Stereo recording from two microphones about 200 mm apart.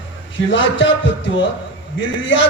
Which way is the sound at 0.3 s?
70° left (ahead or behind).